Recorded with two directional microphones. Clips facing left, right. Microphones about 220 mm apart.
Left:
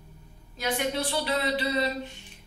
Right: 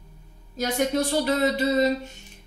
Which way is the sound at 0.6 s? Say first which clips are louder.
Right 5 dB; 40° right (ahead or behind).